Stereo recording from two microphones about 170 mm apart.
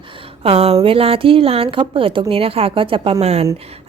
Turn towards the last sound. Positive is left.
turn(degrees=-40)  # may be behind; listen again after turning